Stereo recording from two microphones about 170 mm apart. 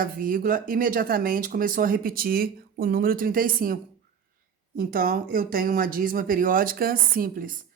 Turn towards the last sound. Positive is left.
turn(degrees=-55)  # may be behind; listen again after turning